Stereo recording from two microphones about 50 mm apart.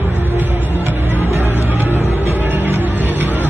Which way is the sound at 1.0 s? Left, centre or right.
Right.